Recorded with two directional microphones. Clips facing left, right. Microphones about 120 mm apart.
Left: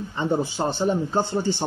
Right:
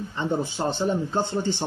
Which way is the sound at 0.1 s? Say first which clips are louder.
Left 3 dB; 15° left (ahead or behind).